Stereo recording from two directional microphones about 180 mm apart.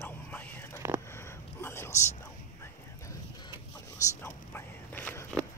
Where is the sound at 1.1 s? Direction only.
15° left (ahead or behind).